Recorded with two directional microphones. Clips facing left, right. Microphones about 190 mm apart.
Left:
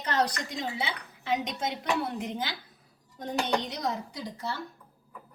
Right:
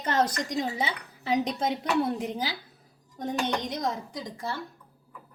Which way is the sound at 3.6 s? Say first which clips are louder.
Right 3 dB; 50° right (ahead or behind).